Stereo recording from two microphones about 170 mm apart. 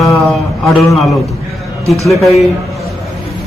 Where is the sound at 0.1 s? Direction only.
Centre (ahead or behind).